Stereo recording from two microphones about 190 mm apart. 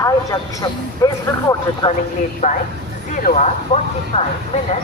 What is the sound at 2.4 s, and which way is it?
Speech, 35° left (ahead or behind).